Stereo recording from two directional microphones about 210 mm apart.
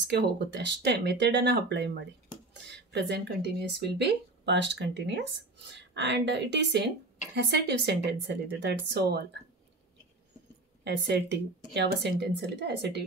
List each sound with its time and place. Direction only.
0.0 s speech: 55° right (ahead or behind)
10.8 s speech: 55° right (ahead or behind)